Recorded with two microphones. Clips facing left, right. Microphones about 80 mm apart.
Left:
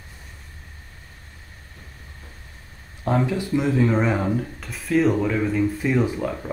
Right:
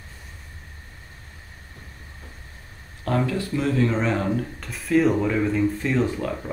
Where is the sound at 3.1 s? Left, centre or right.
Centre.